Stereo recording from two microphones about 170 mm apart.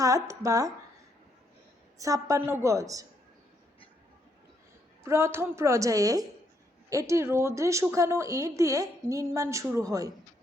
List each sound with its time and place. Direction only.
0.0 s a woman's voice: 20° right (ahead or behind)
2.0 s a woman's voice: 20° right (ahead or behind)
5.0 s a woman's voice: 15° right (ahead or behind)